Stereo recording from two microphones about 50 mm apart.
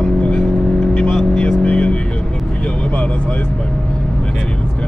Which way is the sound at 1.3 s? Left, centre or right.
Left.